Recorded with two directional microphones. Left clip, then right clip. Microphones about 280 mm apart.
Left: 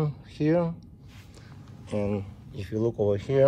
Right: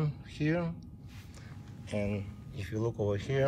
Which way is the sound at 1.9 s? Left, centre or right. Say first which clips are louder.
Left 6 dB; centre.